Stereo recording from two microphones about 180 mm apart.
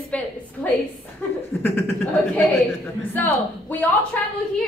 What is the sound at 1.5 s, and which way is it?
Speech, 10° left (ahead or behind).